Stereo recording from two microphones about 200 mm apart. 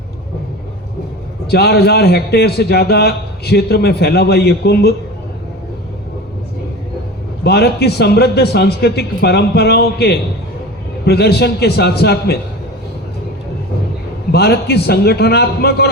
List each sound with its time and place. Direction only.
1.5 s a man's voice: 55° left (ahead or behind)
7.4 s a man's voice: 55° left (ahead or behind)
14.3 s a man's voice: 55° left (ahead or behind)